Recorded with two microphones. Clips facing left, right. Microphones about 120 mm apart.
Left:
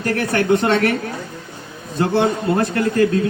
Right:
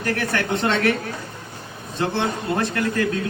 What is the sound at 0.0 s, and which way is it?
Speech, 35° left (ahead or behind).